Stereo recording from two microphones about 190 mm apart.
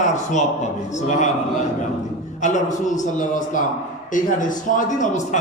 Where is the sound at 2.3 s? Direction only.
40° left (ahead or behind).